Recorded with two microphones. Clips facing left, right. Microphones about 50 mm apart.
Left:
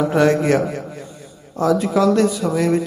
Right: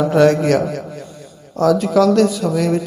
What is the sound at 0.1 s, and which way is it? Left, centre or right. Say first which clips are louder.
A man's voice: right 4 dB; left.